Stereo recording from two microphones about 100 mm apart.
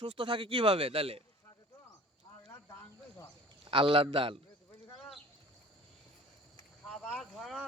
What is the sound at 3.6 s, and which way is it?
Speech, 60° right (ahead or behind).